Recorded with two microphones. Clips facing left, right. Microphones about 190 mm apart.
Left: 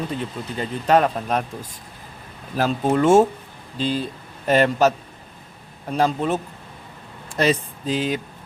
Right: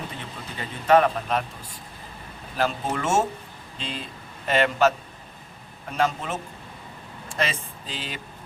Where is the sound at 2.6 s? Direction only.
35° left (ahead or behind).